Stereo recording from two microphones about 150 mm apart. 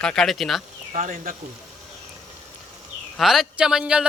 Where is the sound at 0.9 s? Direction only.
60° right (ahead or behind).